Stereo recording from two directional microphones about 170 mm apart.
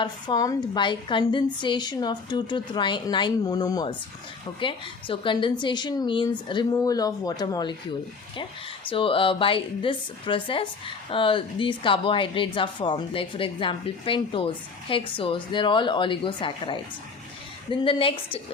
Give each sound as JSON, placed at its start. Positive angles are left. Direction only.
{"t": 0.0, "sound": "a woman's voice", "side_deg": 25}